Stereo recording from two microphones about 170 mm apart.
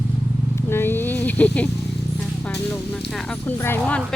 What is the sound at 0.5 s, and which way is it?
Vehicle, 15° left (ahead or behind).